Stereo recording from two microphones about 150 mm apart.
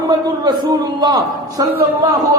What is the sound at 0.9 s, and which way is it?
Speech, 25° right (ahead or behind).